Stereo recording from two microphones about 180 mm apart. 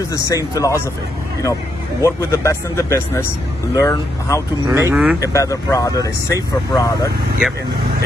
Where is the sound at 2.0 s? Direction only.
15° left (ahead or behind).